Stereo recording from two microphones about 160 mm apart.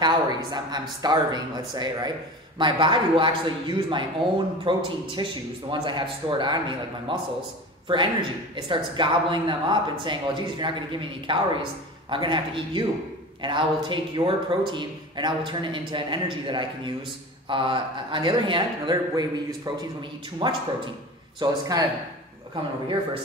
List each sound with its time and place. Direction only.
0.0 s a man's voice: 25° right (ahead or behind)